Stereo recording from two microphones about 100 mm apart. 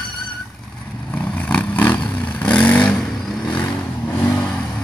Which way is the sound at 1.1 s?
15° left (ahead or behind).